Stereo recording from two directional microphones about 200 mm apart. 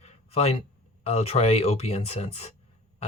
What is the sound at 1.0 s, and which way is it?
Speech, 30° left (ahead or behind).